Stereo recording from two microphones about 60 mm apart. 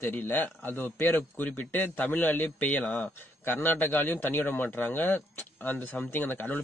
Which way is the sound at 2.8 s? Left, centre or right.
Centre.